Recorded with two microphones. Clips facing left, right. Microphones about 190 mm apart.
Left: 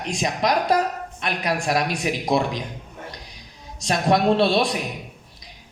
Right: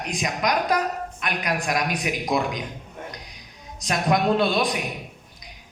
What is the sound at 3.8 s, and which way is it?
Speech, 30° left (ahead or behind).